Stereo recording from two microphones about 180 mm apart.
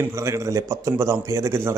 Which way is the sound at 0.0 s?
15° right (ahead or behind).